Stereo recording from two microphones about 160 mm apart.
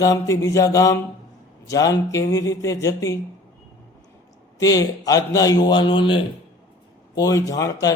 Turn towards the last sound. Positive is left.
turn(degrees=20)  # may be behind; listen again after turning